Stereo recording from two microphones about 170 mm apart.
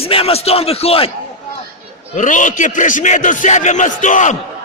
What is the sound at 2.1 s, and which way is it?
A man's voice, 50° left (ahead or behind).